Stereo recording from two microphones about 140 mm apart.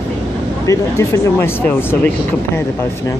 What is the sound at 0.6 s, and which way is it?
Speech, 25° left (ahead or behind).